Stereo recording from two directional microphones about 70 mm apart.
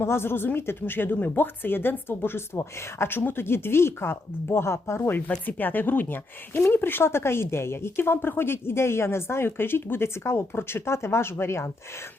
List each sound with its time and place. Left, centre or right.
0.0 s speech: left